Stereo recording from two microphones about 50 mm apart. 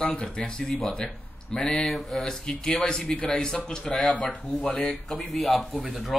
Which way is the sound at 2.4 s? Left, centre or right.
Centre.